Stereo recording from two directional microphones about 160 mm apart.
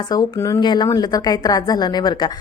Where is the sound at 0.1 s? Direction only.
20° left (ahead or behind).